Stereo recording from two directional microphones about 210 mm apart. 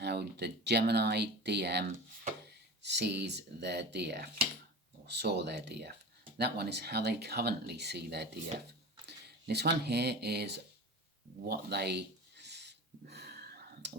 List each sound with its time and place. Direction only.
0.0 s speech: 50° right (ahead or behind)
2.8 s speech: 55° right (ahead or behind)
11.4 s a sound: 50° right (ahead or behind)